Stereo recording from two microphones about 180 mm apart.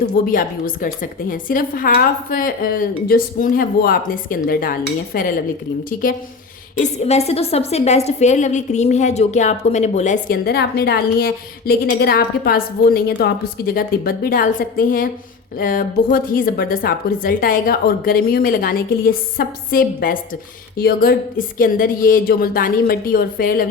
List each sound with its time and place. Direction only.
0.3 s a woman's voice: 50° left (ahead or behind)
6.7 s a woman's voice: 40° left (ahead or behind)